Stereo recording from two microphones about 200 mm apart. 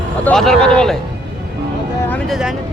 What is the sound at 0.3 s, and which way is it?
Speech, centre (ahead or behind).